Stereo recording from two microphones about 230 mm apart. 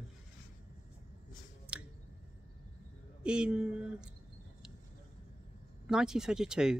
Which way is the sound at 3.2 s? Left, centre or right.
Centre.